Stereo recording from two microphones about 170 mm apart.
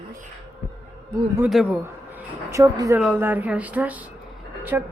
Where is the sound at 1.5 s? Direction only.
5° right (ahead or behind).